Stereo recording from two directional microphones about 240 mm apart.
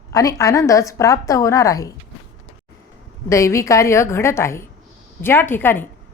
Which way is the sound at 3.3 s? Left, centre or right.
Centre.